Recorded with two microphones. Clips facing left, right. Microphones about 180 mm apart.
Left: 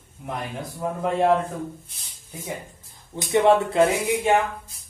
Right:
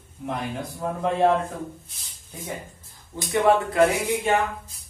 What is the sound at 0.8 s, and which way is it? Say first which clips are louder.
Speech: even; 5° left (ahead or behind).